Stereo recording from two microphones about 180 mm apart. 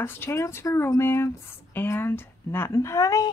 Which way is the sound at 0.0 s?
15° left (ahead or behind).